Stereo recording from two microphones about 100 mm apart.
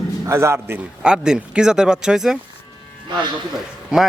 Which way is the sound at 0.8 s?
10° right (ahead or behind).